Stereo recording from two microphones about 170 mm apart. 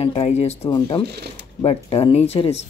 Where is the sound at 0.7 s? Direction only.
30° left (ahead or behind).